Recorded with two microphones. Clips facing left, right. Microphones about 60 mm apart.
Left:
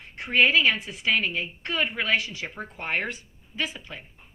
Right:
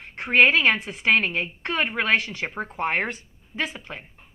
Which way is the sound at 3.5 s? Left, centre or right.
Right.